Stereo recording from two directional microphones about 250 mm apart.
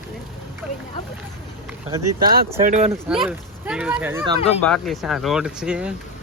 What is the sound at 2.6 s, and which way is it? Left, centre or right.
Speech, right.